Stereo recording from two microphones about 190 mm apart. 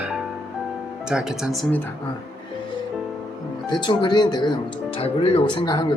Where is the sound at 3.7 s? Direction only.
25° left (ahead or behind).